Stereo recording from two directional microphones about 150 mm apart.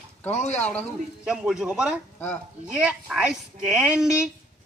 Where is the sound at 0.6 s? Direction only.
10° left (ahead or behind).